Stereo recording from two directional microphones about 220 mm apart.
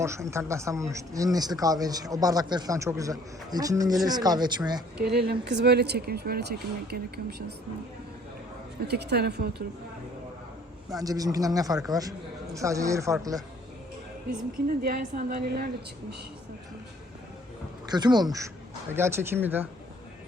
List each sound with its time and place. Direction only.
0.0 s speech: 15° right (ahead or behind)
5.1 s speech: 45° right (ahead or behind)
8.9 s speech: 50° right (ahead or behind)
11.0 s speech: 15° right (ahead or behind)
14.8 s speech: 40° right (ahead or behind)
17.9 s speech: 20° right (ahead or behind)